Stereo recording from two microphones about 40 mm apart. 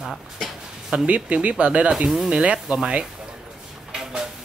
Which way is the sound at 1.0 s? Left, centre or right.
Right.